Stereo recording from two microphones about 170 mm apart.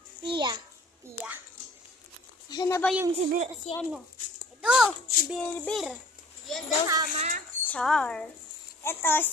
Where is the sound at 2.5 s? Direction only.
20° left (ahead or behind).